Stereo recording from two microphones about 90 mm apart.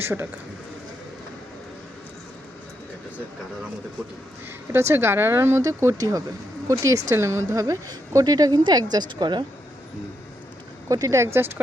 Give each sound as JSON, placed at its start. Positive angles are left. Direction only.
{"t": 0.0, "sound": "speech", "side_deg": -25}
{"t": 4.7, "sound": "a woman's voice", "side_deg": -30}
{"t": 10.8, "sound": "speech", "side_deg": -40}